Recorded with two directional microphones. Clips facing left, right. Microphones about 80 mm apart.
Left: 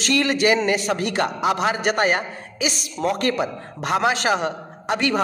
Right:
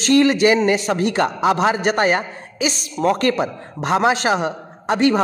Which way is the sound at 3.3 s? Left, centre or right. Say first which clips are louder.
Right 2 dB; right.